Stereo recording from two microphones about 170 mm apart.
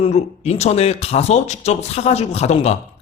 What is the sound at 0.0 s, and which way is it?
A man's voice, 40° left (ahead or behind).